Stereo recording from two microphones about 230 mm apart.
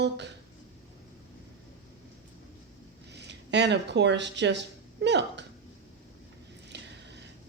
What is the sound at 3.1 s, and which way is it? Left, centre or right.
Speech, right.